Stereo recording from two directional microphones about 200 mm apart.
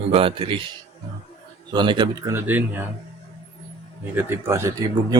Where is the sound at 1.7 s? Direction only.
20° right (ahead or behind).